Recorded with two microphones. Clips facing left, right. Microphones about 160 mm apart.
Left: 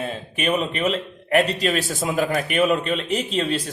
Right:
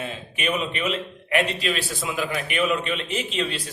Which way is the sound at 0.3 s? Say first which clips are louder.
Left 4 dB; 40° left (ahead or behind).